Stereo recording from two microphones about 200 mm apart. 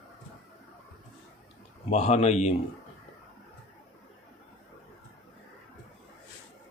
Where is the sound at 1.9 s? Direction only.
30° left (ahead or behind).